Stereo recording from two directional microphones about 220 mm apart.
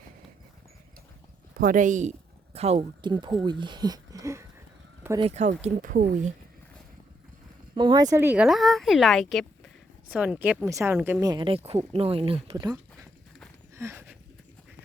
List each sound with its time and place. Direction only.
1.5 s speech: 35° right (ahead or behind); by 4.4 s 15° right (ahead or behind)
5.2 s speech: 30° right (ahead or behind)
7.8 s speech: 20° right (ahead or behind)
13.7 s a sound: 10° right (ahead or behind)